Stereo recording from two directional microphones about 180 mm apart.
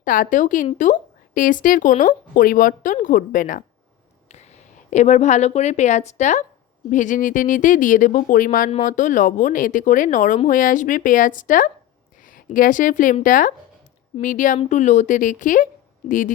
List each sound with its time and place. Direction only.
0.0 s a woman's voice: 50° left (ahead or behind)
4.9 s a woman's voice: 40° left (ahead or behind)